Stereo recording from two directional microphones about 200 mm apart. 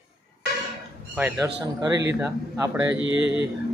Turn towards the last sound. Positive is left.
turn(degrees=-5)  # may be behind; listen again after turning